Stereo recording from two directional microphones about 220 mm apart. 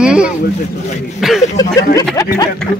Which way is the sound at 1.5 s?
15° left (ahead or behind).